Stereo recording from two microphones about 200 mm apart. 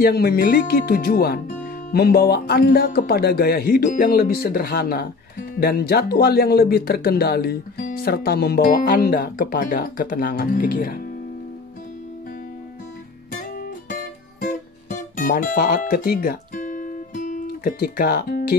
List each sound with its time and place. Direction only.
0.0 s speech: 50° left (ahead or behind)
13.3 s music: 45° left (ahead or behind)